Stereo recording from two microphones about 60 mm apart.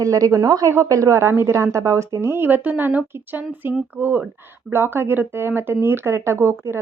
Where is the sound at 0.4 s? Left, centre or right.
Right.